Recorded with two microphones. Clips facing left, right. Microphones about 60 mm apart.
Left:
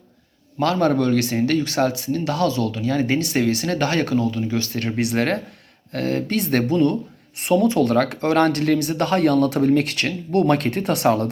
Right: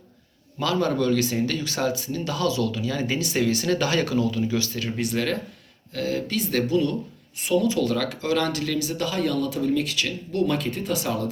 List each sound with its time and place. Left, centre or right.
0.6 s speech: left
4.4 s speech: left